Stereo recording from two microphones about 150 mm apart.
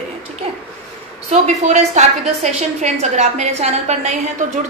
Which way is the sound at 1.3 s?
50° right (ahead or behind).